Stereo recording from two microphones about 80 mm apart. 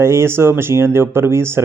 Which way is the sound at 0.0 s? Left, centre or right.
Right.